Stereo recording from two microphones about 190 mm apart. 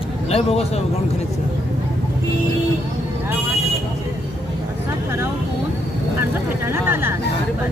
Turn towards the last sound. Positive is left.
turn(degrees=-10)  # may be behind; listen again after turning